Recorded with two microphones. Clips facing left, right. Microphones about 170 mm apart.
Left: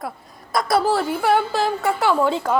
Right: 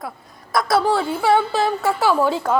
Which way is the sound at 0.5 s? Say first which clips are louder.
Right 1 dB; centre (ahead or behind).